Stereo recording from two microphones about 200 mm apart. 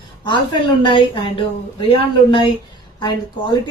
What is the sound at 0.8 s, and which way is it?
Speech, 25° left (ahead or behind).